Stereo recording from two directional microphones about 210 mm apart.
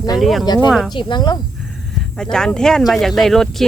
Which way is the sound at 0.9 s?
20° left (ahead or behind).